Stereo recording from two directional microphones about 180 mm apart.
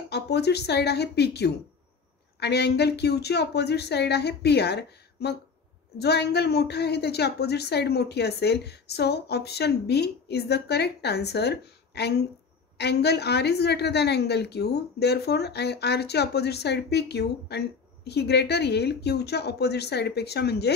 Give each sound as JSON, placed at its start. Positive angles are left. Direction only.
{"t": 0.1, "sound": "a woman's voice", "side_deg": 65}